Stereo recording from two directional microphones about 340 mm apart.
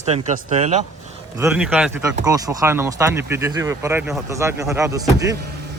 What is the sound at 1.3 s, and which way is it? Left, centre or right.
Speech, centre.